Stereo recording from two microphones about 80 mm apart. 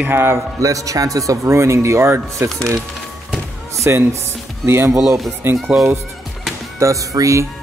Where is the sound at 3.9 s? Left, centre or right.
Right.